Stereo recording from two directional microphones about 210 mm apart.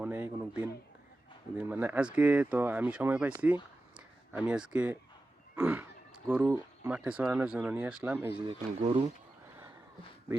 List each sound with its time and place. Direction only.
0.0 s speech: 10° right (ahead or behind)
8.5 s speech: 30° right (ahead or behind)